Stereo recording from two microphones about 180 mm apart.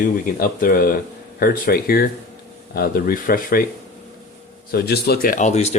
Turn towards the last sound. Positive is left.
turn(degrees=40)  # may be behind; listen again after turning